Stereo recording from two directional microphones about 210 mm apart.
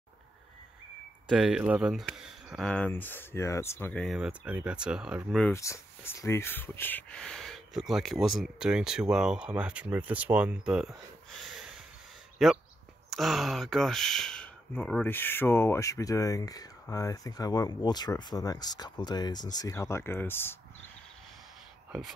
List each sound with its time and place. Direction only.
1.3 s speech: 5° right (ahead or behind)
5.5 s speech: 15° left (ahead or behind); by 11.0 s 5° right (ahead or behind)
12.4 s speech: centre (ahead or behind)